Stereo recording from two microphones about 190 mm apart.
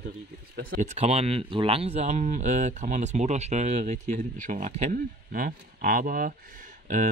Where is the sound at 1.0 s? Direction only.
30° right (ahead or behind).